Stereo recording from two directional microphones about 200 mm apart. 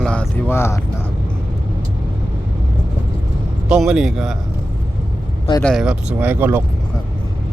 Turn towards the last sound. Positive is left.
turn(degrees=-10)  # may be behind; listen again after turning